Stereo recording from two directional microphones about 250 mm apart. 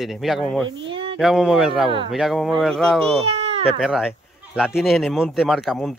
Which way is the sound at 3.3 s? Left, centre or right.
Right.